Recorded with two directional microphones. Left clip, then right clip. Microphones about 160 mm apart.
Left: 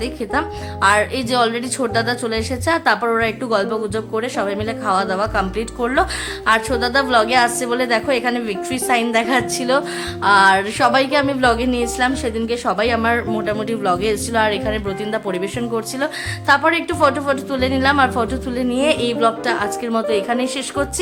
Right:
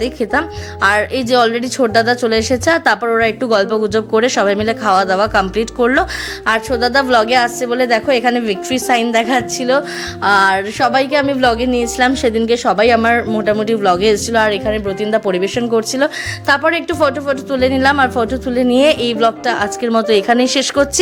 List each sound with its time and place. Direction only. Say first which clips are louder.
0.0 s speech: right 5 dB; 35° right (ahead or behind); by 15.2 s 20° right (ahead or behind)
15.3 s speech: right 7 dB; 30° right (ahead or behind)
18.7 s speech: right 5 dB; 40° right (ahead or behind)